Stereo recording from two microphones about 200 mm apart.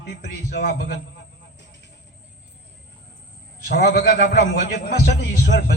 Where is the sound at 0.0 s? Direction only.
55° left (ahead or behind).